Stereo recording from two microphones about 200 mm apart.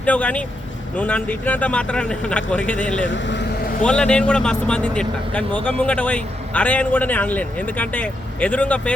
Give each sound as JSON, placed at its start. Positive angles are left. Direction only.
{"t": 0.0, "sound": "speech", "side_deg": 5}
{"t": 3.1, "sound": "speech", "side_deg": 65}
{"t": 3.8, "sound": "speech", "side_deg": 5}